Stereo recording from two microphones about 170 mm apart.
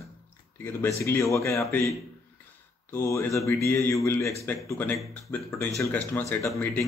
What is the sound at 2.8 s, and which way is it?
A man's voice, 15° left (ahead or behind).